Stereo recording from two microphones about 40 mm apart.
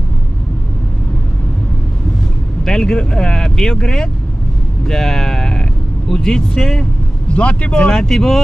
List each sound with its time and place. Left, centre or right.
2.6 s speech: centre
7.3 s speech: left
7.9 s speech: centre